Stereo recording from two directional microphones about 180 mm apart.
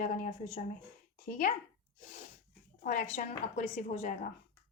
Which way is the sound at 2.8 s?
45° left (ahead or behind).